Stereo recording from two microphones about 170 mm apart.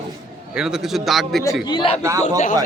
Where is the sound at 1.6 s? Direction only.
30° left (ahead or behind).